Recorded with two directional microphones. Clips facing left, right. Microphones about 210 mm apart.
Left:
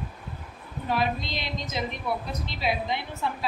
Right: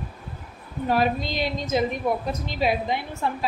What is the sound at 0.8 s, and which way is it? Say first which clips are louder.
A woman's voice: right 5 dB; 45° right (ahead or behind).